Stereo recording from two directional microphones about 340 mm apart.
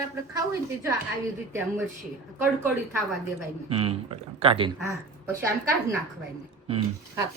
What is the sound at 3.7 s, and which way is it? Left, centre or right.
Speech, centre.